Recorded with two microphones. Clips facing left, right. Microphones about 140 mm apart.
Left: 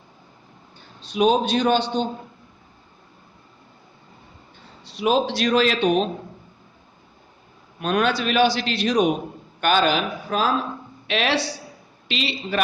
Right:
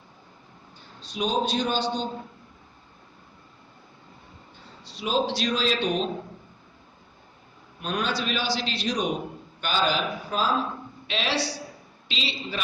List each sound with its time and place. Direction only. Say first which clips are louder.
1.0 s a man's voice: left 7 dB; 65° left (ahead or behind)
4.9 s a man's voice: left 5 dB; 60° left (ahead or behind)
7.8 s a man's voice: left 7 dB; 65° left (ahead or behind)